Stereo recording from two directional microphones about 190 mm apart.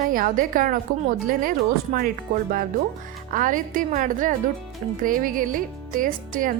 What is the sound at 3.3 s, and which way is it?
A woman's voice, 45° right (ahead or behind).